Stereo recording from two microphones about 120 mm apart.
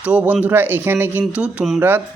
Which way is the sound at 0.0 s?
10° right (ahead or behind).